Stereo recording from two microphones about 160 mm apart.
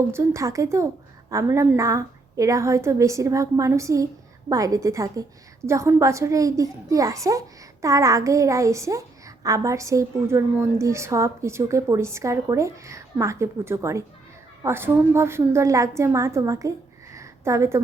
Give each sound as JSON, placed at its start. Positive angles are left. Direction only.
{"t": 0.1, "sound": "a woman's voice", "side_deg": -15}